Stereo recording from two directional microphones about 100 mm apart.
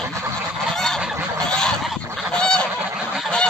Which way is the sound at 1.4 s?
5° left (ahead or behind).